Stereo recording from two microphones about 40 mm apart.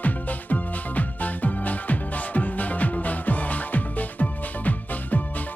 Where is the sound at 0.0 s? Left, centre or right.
Left.